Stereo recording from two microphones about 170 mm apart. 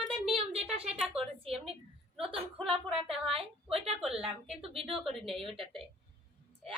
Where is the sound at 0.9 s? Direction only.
Centre (ahead or behind).